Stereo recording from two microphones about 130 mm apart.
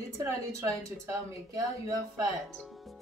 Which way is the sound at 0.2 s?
20° right (ahead or behind).